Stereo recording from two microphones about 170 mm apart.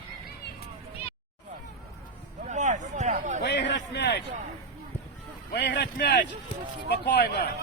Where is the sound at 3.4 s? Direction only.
90° left.